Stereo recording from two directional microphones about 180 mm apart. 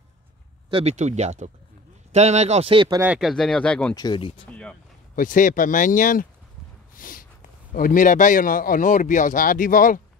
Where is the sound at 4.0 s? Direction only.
25° left (ahead or behind).